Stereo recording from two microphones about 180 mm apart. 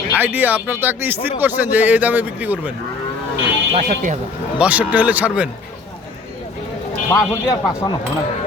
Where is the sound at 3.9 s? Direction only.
50° right (ahead or behind).